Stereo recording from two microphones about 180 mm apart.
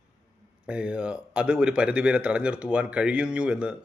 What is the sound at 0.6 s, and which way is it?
A man's voice, 5° right (ahead or behind).